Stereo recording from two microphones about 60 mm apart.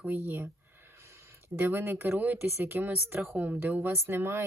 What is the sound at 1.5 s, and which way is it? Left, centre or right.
Speech, right.